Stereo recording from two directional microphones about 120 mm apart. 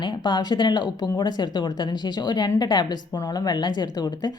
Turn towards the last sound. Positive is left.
turn(degrees=35)  # may be behind; listen again after turning